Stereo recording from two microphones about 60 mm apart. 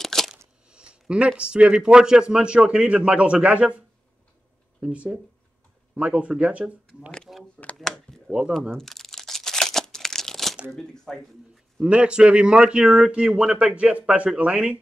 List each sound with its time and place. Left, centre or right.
0.0 s a sound: centre
0.7 s a man's voice: centre
4.9 s speech: right
7.3 s a sound: centre
8.3 s a man's voice: centre
8.7 s crumpling: centre
10.7 s speech: centre
11.8 s a man's voice: centre
13.1 s speech: centre